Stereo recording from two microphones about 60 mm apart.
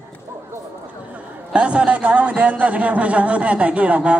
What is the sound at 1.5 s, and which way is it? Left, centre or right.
Speech, centre.